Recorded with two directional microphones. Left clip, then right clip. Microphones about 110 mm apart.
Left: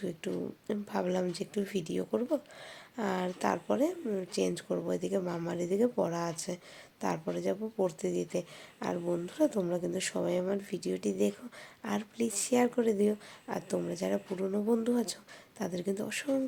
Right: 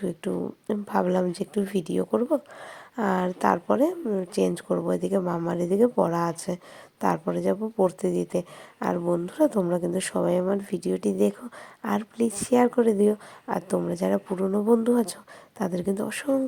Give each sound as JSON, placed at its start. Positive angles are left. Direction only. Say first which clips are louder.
{"t": 0.0, "sound": "speech", "louder": "right 7 dB", "side_deg": -45}